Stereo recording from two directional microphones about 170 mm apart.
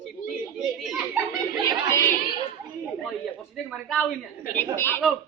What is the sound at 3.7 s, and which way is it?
Speech, 5° right (ahead or behind).